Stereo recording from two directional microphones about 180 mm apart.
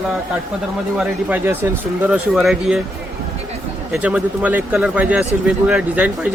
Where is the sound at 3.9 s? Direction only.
5° right (ahead or behind).